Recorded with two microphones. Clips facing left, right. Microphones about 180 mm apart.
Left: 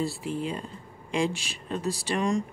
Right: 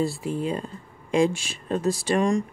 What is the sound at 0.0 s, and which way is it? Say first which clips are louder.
Speech: right 4 dB; 45° right (ahead or behind).